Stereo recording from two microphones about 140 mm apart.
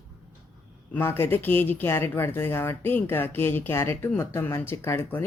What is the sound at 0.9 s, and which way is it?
Speech, 15° left (ahead or behind).